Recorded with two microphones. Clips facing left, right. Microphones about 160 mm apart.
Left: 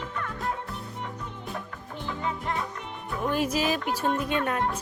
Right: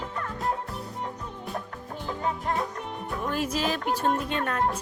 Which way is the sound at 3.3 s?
10° left (ahead or behind).